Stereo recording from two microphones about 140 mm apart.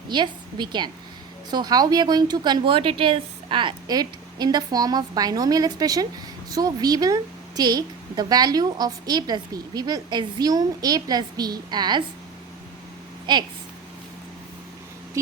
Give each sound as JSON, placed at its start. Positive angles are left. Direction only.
{"t": 0.1, "sound": "a woman's voice", "side_deg": -35}
{"t": 13.3, "sound": "a woman's voice", "side_deg": -35}